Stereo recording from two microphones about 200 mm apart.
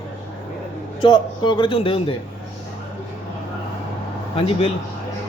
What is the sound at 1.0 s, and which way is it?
Speech, 20° left (ahead or behind).